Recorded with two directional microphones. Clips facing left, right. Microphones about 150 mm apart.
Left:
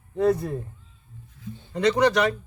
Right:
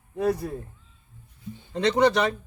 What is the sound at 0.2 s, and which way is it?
Speech, 10° right (ahead or behind).